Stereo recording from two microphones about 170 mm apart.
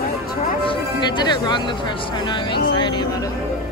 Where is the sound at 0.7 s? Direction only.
25° left (ahead or behind).